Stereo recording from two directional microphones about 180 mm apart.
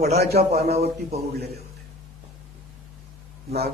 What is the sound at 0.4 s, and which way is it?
Speech, 60° right (ahead or behind).